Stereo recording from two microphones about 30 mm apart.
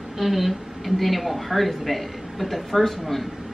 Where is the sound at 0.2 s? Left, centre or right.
Centre.